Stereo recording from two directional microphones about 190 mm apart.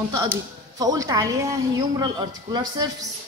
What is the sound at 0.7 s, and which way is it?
A woman's voice, 20° right (ahead or behind).